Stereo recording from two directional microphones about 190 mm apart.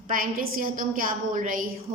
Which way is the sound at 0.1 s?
50° right (ahead or behind).